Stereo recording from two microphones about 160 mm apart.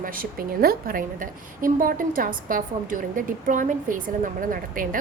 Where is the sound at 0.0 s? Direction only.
65° right (ahead or behind).